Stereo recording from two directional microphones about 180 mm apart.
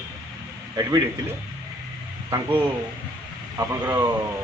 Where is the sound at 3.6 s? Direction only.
15° right (ahead or behind).